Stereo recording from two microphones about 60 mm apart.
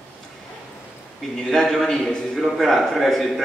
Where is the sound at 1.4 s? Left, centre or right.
Centre.